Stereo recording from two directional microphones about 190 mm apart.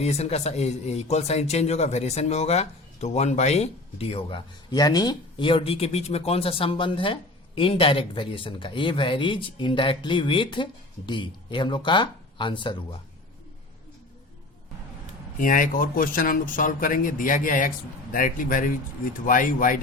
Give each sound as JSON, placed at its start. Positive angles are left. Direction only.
{"t": 0.0, "sound": "speech", "side_deg": 35}
{"t": 15.4, "sound": "speech", "side_deg": 45}